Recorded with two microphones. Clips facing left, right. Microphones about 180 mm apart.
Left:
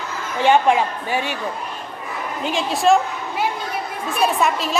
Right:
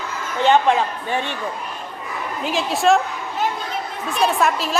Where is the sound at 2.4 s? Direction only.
Centre (ahead or behind).